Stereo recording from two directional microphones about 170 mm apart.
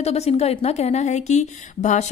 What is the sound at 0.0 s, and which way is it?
Speech, 40° left (ahead or behind).